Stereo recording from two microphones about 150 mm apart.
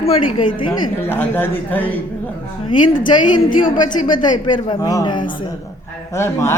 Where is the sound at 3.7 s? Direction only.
30° left (ahead or behind).